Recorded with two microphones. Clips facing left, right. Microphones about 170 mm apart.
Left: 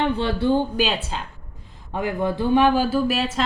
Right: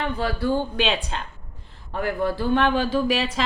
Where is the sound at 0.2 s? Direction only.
25° left (ahead or behind).